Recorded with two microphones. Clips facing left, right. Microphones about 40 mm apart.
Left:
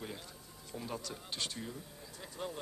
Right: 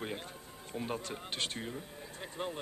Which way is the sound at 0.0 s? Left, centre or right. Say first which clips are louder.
Right 5 dB; right.